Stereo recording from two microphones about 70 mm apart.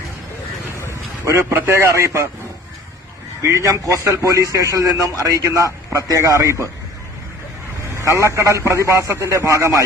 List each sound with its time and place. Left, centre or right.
1.2 s a man's voice: right
3.4 s a man's voice: right
7.9 s a man's voice: right